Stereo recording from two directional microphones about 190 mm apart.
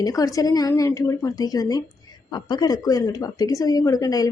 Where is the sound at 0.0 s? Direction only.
20° left (ahead or behind).